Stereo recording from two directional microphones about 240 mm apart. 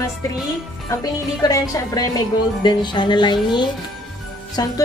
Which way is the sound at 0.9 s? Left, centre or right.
Centre.